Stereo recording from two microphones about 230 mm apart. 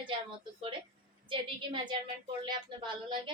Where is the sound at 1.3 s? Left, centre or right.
Right.